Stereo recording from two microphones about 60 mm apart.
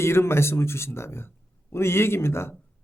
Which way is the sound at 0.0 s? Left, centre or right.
Left.